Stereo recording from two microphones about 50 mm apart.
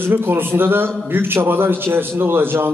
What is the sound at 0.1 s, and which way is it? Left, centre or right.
Speech, right.